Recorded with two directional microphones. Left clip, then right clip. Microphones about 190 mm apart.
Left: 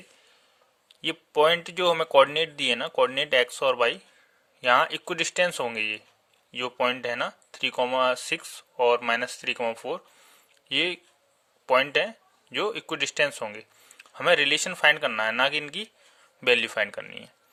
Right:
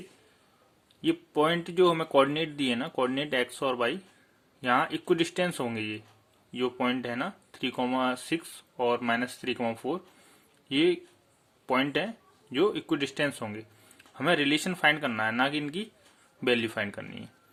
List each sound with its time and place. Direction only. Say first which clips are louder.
0.9 s speech: right 1 dB; 35° left (ahead or behind)